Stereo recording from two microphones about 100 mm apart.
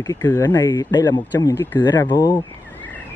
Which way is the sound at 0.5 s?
45° left (ahead or behind).